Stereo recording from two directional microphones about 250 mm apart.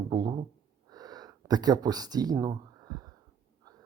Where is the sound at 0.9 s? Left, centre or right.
Centre.